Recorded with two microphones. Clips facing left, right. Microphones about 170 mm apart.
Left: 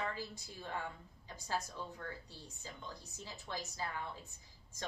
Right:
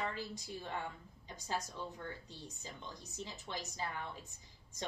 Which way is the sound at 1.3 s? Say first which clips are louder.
Even; 20° right (ahead or behind).